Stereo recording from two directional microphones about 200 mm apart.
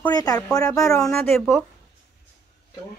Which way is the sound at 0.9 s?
5° left (ahead or behind).